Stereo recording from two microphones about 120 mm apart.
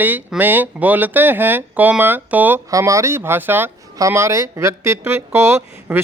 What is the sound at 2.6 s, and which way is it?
Speech, 25° right (ahead or behind).